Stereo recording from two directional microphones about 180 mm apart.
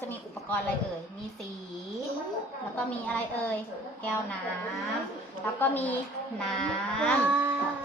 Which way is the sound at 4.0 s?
10° left (ahead or behind).